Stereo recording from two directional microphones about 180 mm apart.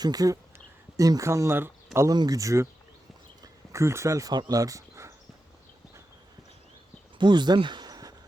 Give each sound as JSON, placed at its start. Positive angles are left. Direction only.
{"t": 0.0, "sound": "speech", "side_deg": -20}
{"t": 7.2, "sound": "speech", "side_deg": -25}